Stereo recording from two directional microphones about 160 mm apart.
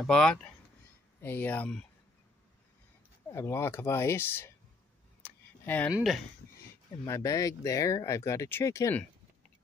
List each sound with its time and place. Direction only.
0.0 s speech: 5° left (ahead or behind)
3.3 s speech: 15° left (ahead or behind)
5.2 s a sound: 10° left (ahead or behind)
5.9 s speech: centre (ahead or behind)
7.1 s speech: 20° left (ahead or behind)